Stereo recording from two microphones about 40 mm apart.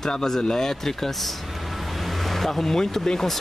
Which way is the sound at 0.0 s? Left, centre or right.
Centre.